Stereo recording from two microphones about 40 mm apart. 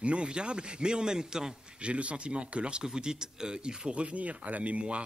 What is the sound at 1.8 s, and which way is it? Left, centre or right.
Speech, right.